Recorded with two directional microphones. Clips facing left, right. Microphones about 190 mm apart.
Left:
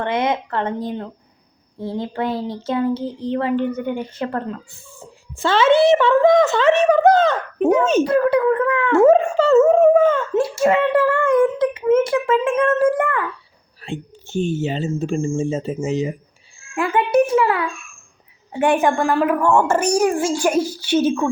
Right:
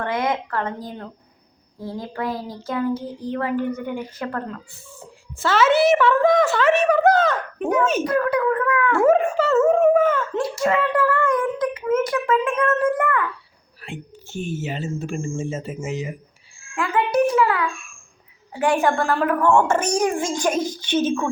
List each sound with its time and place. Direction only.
0.0 s a child's voice: 25° left (ahead or behind)